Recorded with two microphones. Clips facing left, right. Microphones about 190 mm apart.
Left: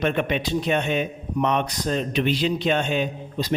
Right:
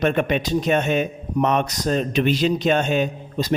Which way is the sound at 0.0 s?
45° right (ahead or behind).